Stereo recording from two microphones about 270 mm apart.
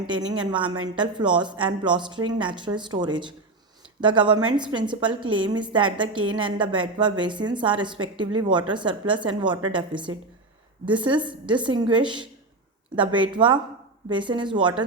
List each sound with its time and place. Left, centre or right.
0.2 s a woman's voice: centre
13.3 s a woman's voice: centre